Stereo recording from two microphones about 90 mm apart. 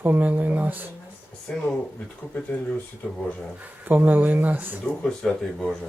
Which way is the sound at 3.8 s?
20° right (ahead or behind).